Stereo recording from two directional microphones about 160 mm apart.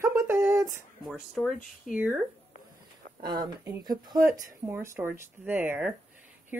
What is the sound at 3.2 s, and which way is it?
Speech, 25° right (ahead or behind).